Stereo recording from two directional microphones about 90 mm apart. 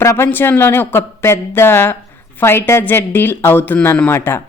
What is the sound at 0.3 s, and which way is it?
A woman's voice, 20° left (ahead or behind).